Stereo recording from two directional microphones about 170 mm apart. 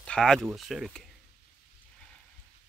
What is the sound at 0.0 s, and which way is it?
Speech, 5° left (ahead or behind).